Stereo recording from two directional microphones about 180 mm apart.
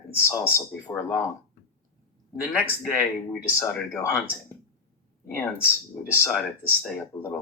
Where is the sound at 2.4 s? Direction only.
10° left (ahead or behind).